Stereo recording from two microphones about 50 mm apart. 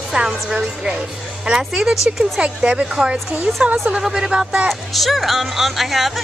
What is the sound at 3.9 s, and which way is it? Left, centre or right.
Speech, centre.